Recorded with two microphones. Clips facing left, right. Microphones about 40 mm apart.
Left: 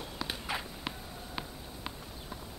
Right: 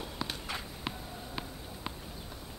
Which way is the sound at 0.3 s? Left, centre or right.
Centre.